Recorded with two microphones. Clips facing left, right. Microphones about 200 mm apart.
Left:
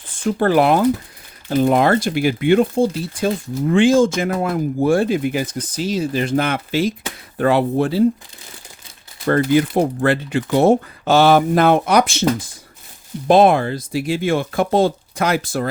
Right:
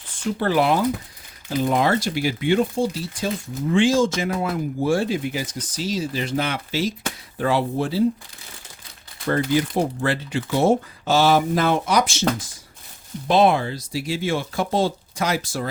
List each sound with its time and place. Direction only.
0.3 s speech: 50° left (ahead or behind)
9.2 s speech: 60° left (ahead or behind)
13.2 s speech: 50° left (ahead or behind)